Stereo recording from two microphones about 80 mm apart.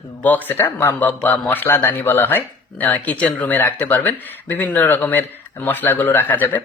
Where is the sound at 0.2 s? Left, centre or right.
Left.